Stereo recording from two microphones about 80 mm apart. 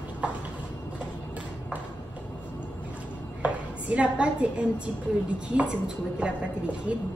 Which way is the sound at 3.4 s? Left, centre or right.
Centre.